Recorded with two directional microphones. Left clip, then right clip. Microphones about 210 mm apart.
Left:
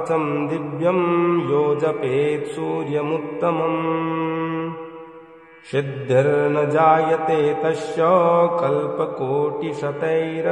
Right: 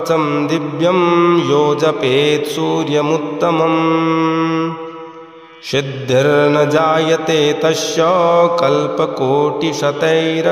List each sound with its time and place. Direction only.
0.1 s mantra: 20° right (ahead or behind)
5.7 s mantra: 30° right (ahead or behind)